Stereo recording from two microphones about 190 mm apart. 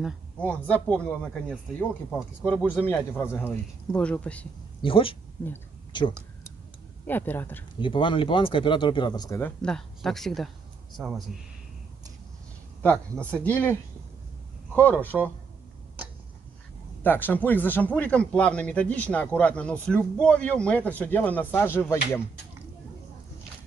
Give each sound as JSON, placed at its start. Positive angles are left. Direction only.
{"t": 0.0, "sound": "speech", "side_deg": 5}
{"t": 4.8, "sound": "speech", "side_deg": 30}
{"t": 7.1, "sound": "speech", "side_deg": 10}
{"t": 7.8, "sound": "speech", "side_deg": 25}
{"t": 9.4, "sound": "speech", "side_deg": 5}
{"t": 12.8, "sound": "speech", "side_deg": 5}
{"t": 17.0, "sound": "speech", "side_deg": 10}